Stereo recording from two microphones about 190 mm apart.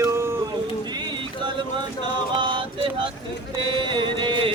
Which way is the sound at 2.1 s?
25° right (ahead or behind).